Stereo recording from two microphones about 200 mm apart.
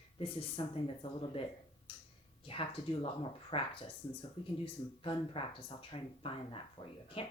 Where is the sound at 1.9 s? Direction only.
25° left (ahead or behind).